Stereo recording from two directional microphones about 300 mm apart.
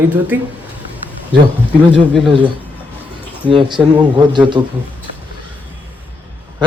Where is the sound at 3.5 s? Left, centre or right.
Centre.